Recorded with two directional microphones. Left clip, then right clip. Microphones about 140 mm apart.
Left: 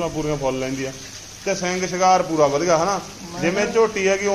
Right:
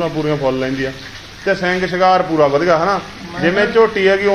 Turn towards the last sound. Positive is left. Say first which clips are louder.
# right 6 dB
turn(degrees=15)  # may be behind; listen again after turning